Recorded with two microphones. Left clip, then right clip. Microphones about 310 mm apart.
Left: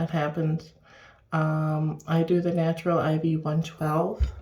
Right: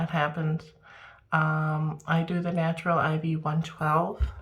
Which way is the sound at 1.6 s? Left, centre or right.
Centre.